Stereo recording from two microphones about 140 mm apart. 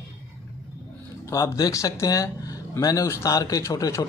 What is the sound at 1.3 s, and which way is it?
A man's voice, 25° left (ahead or behind).